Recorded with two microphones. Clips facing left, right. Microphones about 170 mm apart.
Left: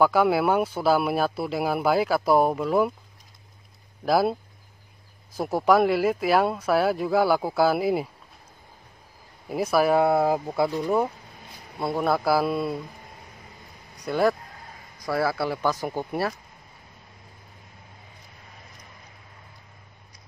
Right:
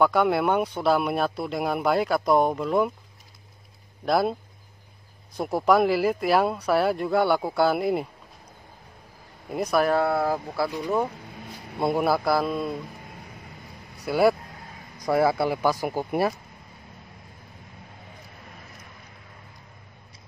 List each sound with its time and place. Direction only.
0.0 s speech: 5° left (ahead or behind)
4.0 s speech: 5° left (ahead or behind)
9.5 s speech: 5° left (ahead or behind)
9.9 s speech: 20° left (ahead or behind)
12.3 s speech: 5° left (ahead or behind)
14.0 s speech: 10° right (ahead or behind)
15.0 s speech: 20° right (ahead or behind)